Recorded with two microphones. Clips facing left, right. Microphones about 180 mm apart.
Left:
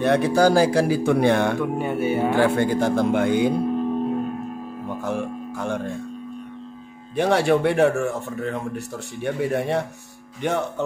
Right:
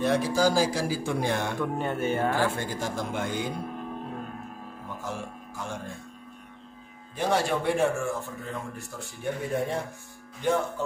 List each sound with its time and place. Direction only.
0.0 s speech: 65° left (ahead or behind)
1.6 s music: 10° left (ahead or behind)
2.3 s speech: 60° left (ahead or behind)
5.0 s music: 60° left (ahead or behind)
7.2 s a man's voice: 70° left (ahead or behind)